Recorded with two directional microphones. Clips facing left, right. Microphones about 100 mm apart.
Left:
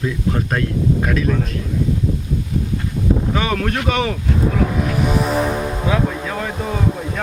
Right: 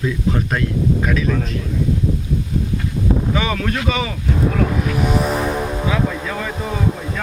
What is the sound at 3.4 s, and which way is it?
Speech, 50° left (ahead or behind).